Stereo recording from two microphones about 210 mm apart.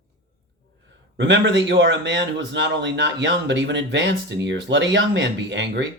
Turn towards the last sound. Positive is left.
turn(degrees=-55)  # may be behind; listen again after turning